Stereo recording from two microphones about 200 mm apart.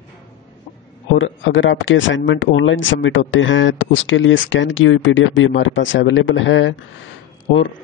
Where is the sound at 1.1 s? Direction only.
75° left (ahead or behind).